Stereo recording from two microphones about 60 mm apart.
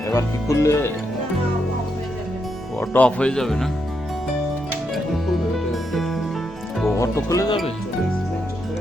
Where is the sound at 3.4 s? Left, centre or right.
Centre.